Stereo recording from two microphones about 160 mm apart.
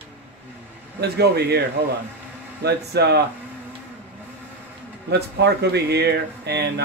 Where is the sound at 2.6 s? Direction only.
90° right.